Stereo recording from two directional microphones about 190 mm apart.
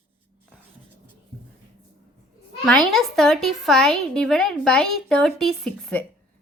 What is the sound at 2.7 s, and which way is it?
A woman's voice, 5° left (ahead or behind).